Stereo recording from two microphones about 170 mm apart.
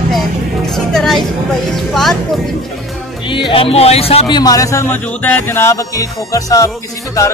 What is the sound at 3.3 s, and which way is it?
Speech, 30° left (ahead or behind).